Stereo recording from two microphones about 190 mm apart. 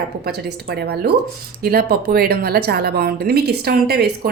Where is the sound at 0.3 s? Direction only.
60° right (ahead or behind).